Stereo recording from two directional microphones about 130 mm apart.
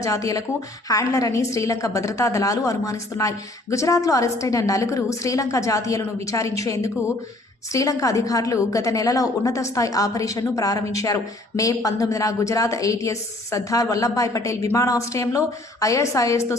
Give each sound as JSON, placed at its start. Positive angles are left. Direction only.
{"t": 0.0, "sound": "a woman's voice", "side_deg": 25}